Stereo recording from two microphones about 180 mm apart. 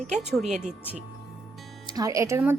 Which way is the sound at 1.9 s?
20° right (ahead or behind).